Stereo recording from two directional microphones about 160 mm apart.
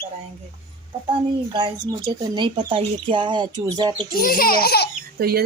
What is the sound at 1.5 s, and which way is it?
Speech, 25° right (ahead or behind).